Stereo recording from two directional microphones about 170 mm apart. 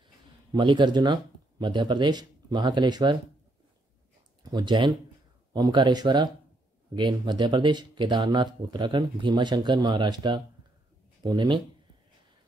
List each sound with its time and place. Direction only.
0.5 s speech: 25° right (ahead or behind)
4.4 s speech: 25° right (ahead or behind)